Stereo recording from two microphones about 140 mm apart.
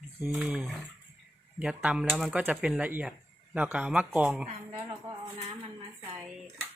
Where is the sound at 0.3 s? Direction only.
10° right (ahead or behind).